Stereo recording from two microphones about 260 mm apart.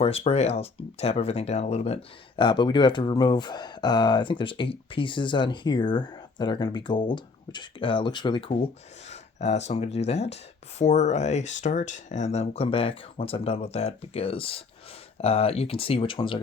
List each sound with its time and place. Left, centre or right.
0.0 s speech: left